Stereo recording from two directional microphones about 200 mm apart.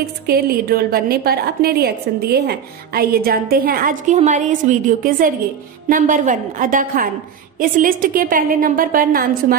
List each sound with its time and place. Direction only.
0.3 s a woman's voice: 50° right (ahead or behind)